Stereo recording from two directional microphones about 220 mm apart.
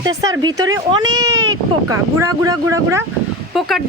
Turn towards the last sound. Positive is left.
turn(degrees=0)  # may be behind; listen again after turning